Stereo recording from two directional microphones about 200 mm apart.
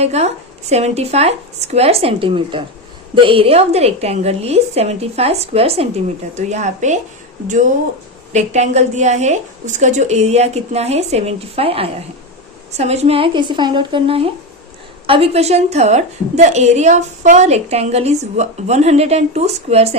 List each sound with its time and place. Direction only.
0.0 s a woman's voice: 30° right (ahead or behind)